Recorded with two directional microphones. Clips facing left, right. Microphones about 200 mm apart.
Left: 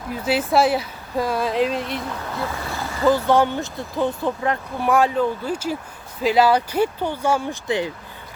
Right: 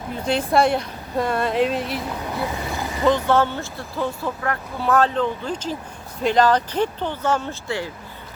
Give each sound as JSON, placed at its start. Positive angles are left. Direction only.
{"t": 0.3, "sound": "speech", "side_deg": 5}
{"t": 2.1, "sound": "speech", "side_deg": -15}
{"t": 3.1, "sound": "speech", "side_deg": 10}